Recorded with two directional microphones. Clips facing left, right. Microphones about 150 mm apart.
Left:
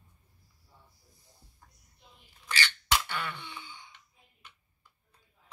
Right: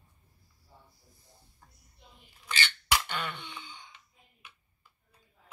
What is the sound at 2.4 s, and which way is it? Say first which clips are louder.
Cough: left 1 dB; 20° right (ahead or behind).